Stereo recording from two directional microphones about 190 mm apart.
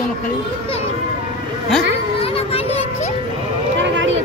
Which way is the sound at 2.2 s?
30° left (ahead or behind).